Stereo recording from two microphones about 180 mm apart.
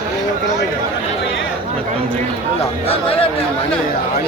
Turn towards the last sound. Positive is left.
turn(degrees=30)  # may be behind; listen again after turning